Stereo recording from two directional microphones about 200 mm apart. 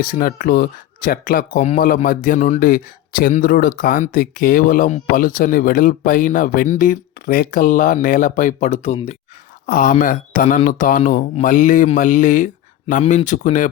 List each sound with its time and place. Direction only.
0.0 s speech: 45° left (ahead or behind)
9.6 s speech: 45° left (ahead or behind)
11.3 s mantra: 40° left (ahead or behind)